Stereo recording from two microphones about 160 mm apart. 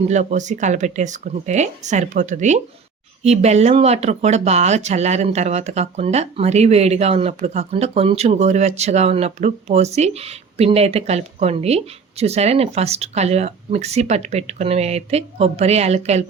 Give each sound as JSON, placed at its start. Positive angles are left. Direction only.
{"t": 0.1, "sound": "speech", "side_deg": -45}